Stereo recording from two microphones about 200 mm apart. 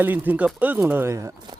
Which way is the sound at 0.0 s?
10° right (ahead or behind).